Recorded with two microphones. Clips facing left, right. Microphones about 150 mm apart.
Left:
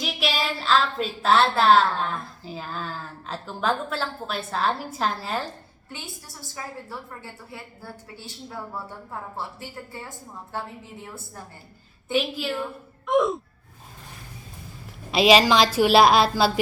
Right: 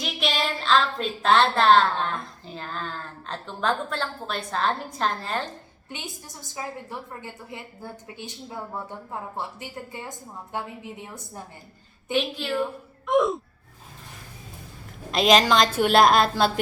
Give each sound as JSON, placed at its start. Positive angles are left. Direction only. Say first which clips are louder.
{"t": 0.0, "sound": "a woman's voice", "louder": "even", "side_deg": 5}
{"t": 5.9, "sound": "a woman's voice", "louder": "right 2 dB", "side_deg": -20}
{"t": 12.1, "sound": "a woman's voice", "louder": "even", "side_deg": 5}
{"t": 15.1, "sound": "a woman's voice", "louder": "left 2 dB", "side_deg": 5}